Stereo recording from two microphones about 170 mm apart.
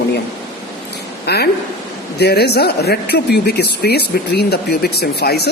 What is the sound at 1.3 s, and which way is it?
Speech, 70° left (ahead or behind).